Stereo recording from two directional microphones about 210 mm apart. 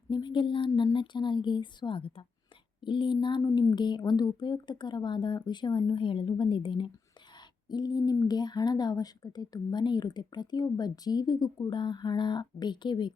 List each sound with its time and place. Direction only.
0.1 s speech: 20° left (ahead or behind)